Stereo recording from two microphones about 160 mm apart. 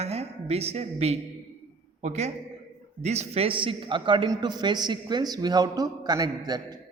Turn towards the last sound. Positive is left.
turn(degrees=-25)  # may be behind; listen again after turning